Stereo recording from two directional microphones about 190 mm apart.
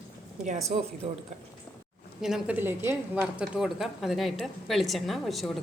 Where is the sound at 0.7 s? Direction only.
40° right (ahead or behind).